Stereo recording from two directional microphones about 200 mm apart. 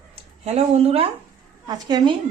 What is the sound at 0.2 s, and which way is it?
Speech, 30° right (ahead or behind).